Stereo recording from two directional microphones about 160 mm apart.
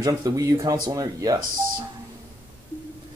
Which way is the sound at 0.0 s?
25° right (ahead or behind).